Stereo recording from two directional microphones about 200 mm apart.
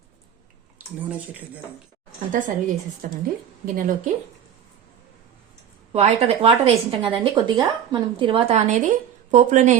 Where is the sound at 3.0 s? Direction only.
45° right (ahead or behind).